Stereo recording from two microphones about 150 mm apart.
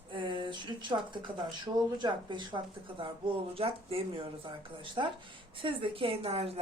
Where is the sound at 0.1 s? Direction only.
30° right (ahead or behind).